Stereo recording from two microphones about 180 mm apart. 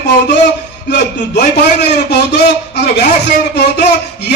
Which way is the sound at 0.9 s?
65° left (ahead or behind).